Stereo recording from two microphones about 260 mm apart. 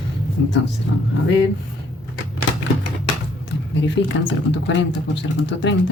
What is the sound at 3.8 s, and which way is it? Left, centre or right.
Speech, left.